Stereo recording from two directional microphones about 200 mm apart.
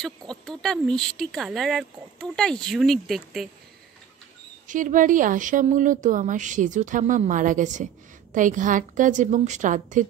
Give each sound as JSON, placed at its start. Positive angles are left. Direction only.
{"t": 0.0, "sound": "speech", "side_deg": 0}
{"t": 4.6, "sound": "speech", "side_deg": -40}